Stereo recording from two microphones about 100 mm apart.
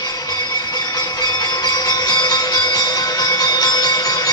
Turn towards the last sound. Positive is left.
turn(degrees=40)  # may be behind; listen again after turning